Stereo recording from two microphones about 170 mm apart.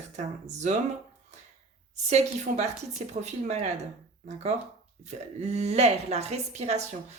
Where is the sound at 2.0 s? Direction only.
40° right (ahead or behind).